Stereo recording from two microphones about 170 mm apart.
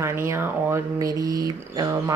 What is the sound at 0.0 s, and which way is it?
Speech, 15° right (ahead or behind).